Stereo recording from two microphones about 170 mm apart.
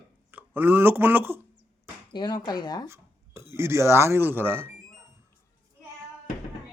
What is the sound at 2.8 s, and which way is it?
Speech, 15° right (ahead or behind).